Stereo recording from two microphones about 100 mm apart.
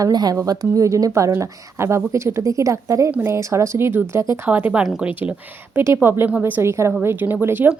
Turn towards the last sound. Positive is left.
turn(degrees=-20)  # may be behind; listen again after turning